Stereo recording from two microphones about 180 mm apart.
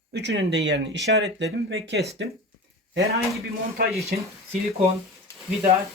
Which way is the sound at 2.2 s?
90° right.